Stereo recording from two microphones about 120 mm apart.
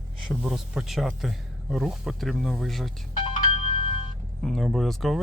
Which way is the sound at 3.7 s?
55° left (ahead or behind).